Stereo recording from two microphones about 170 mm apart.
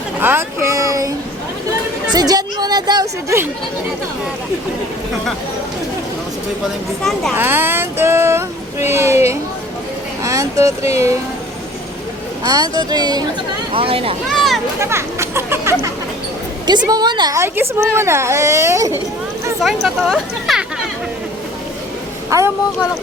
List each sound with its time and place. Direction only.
0.2 s a sound: 15° right (ahead or behind)
2.1 s a woman's voice: 20° right (ahead or behind)
7.3 s speech: 10° right (ahead or behind)
12.5 s a woman's voice: 25° right (ahead or behind)
14.3 s a sound: centre (ahead or behind)
14.8 s speech: 15° right (ahead or behind)
16.6 s speech: 25° right (ahead or behind)
19.6 s speech: centre (ahead or behind)
22.3 s a woman's voice: 20° right (ahead or behind)